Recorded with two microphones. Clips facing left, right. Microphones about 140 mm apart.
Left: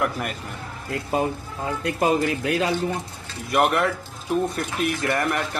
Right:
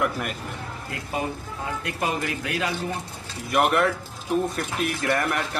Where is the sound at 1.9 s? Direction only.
30° left (ahead or behind).